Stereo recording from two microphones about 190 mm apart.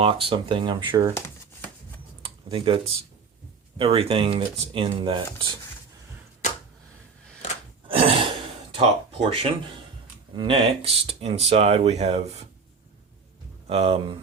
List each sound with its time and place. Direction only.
0.0 s speech: 30° right (ahead or behind)
1.1 s a sound: 15° left (ahead or behind)
2.2 s computer keyboard: 30° right (ahead or behind)
3.8 s speech: 30° right (ahead or behind)
7.9 s gasp: 30° right (ahead or behind)
9.3 s speech: 30° right (ahead or behind)
13.7 s speech: 30° right (ahead or behind)